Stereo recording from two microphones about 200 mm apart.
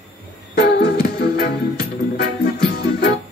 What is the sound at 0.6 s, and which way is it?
Music, 50° left (ahead or behind).